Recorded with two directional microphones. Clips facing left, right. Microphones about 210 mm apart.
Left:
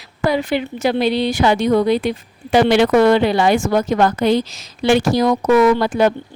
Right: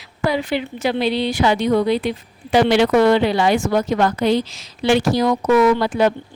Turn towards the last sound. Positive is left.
turn(degrees=45)  # may be behind; listen again after turning